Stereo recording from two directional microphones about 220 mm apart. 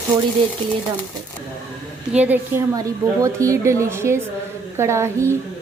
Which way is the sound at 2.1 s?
5° right (ahead or behind).